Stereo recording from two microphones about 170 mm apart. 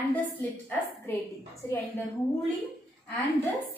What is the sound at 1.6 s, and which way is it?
Speech, 15° left (ahead or behind).